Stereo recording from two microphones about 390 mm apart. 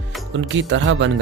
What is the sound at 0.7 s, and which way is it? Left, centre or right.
Speech, right.